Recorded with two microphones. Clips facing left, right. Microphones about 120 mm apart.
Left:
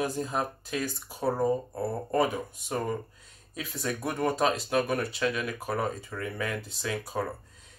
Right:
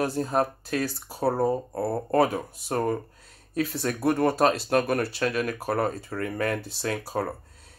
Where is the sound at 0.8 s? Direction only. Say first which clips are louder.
Right 3 dB; 35° right (ahead or behind).